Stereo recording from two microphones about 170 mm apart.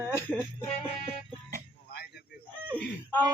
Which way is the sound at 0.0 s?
10° left (ahead or behind).